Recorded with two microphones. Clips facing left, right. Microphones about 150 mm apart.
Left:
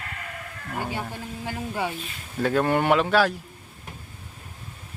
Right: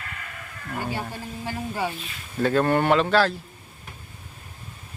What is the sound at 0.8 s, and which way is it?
Speech, 15° left (ahead or behind).